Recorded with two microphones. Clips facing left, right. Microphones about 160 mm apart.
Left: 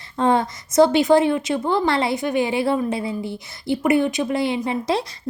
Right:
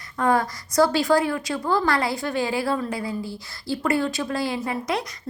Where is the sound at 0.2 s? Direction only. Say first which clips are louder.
Left 3 dB; 25° left (ahead or behind).